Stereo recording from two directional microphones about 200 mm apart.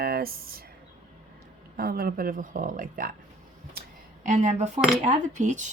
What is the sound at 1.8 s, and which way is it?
Speech, 50° right (ahead or behind).